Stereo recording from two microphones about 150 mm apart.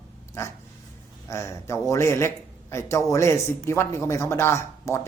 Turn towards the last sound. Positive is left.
turn(degrees=15)  # may be behind; listen again after turning